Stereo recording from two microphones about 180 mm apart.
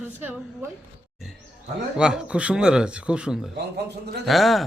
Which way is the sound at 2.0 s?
5° right (ahead or behind).